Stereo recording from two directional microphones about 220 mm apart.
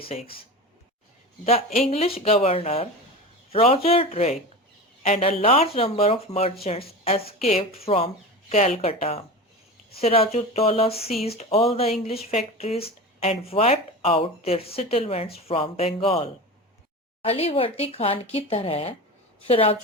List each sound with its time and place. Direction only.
1.5 s speech: 30° left (ahead or behind)